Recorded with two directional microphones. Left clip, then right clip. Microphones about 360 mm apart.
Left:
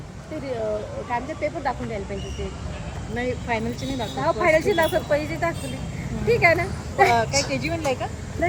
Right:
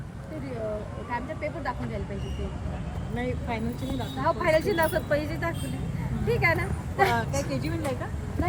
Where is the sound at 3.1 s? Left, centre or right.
Centre.